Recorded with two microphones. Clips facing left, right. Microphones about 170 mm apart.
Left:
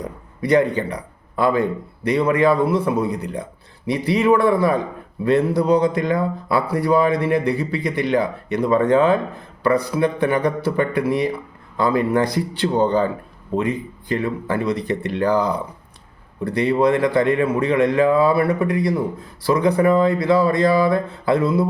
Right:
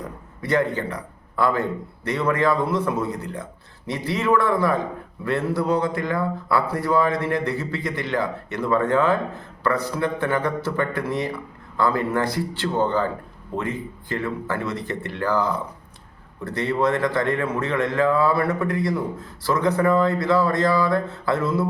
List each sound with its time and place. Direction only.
0.0 s a man's voice: 15° left (ahead or behind)